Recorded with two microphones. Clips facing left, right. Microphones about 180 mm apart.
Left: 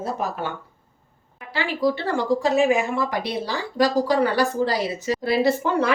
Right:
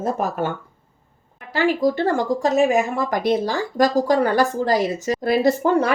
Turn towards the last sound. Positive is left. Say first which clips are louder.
# right 3 dB
turn(degrees=-40)  # may be behind; listen again after turning